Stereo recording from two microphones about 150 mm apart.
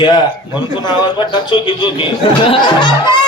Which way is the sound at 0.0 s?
30° left (ahead or behind).